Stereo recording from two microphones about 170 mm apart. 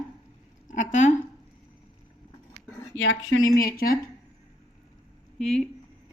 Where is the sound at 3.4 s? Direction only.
55° left (ahead or behind).